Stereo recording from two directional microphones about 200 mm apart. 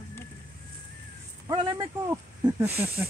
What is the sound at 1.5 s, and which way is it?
Speech, 20° right (ahead or behind).